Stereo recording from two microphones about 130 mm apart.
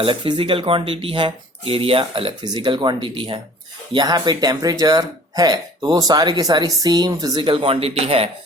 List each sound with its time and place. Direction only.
0.0 s speech: 40° right (ahead or behind)